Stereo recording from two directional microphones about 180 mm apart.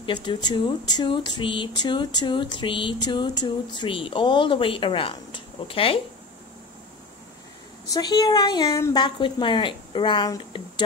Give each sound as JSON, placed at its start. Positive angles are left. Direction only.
{"t": 0.0, "sound": "speech", "side_deg": 25}
{"t": 7.9, "sound": "speech", "side_deg": 20}